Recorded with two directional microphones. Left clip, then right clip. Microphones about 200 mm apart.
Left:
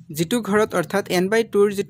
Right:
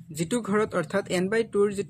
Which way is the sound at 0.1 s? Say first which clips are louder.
Left 6 dB; 40° left (ahead or behind).